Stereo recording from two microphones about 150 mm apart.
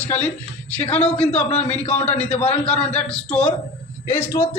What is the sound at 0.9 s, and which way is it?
A man's voice, 5° left (ahead or behind).